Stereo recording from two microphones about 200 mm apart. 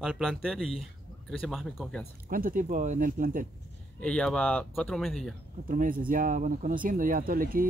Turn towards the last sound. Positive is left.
turn(degrees=-45)  # may be behind; listen again after turning